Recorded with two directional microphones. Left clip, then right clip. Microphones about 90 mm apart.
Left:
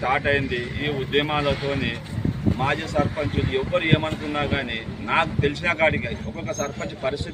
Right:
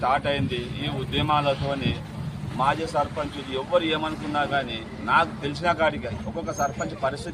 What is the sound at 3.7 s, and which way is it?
A man's voice, 30° right (ahead or behind).